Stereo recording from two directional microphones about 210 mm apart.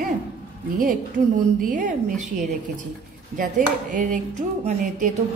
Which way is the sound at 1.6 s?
40° right (ahead or behind).